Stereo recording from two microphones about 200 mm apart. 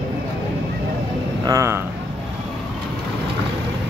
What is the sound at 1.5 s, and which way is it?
Speech, 15° right (ahead or behind).